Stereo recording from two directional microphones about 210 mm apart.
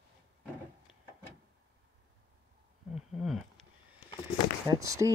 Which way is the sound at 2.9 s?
Centre (ahead or behind).